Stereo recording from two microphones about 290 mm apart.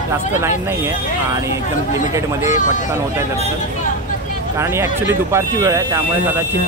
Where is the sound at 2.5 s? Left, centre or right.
Left.